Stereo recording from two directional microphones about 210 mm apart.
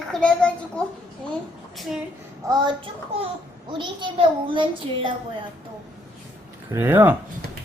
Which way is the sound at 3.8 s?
20° right (ahead or behind).